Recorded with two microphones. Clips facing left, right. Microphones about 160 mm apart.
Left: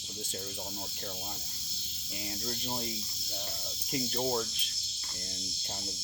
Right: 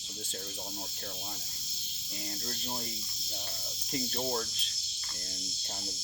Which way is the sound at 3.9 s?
Centre (ahead or behind).